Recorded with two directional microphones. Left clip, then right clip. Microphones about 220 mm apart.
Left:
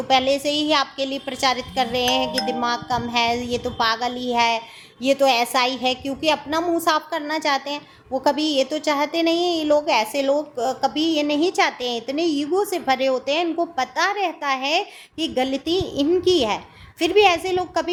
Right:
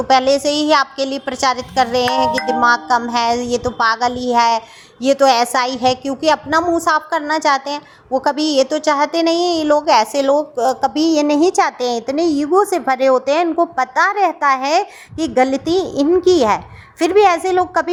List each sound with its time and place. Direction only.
0.1 s a woman's voice: 20° right (ahead or behind)